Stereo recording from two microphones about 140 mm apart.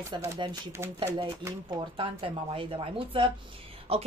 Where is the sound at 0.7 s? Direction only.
20° right (ahead or behind).